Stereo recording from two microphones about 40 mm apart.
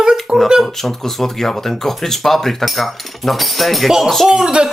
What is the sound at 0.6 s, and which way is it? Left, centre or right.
Speech, centre.